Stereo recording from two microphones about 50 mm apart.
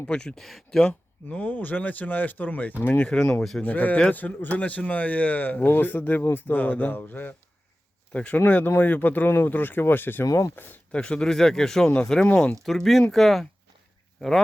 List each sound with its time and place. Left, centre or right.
0.0 s speech: centre
0.3 s speech: centre
0.9 s speech: left
1.5 s speech: left
3.0 s speech: left
3.6 s speech: left
8.1 s speech: left
10.9 s speech: centre
12.6 s speech: centre